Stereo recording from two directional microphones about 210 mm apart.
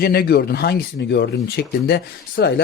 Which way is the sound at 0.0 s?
50° left (ahead or behind).